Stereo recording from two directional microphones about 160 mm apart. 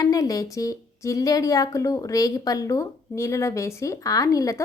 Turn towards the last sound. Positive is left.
turn(degrees=20)  # may be behind; listen again after turning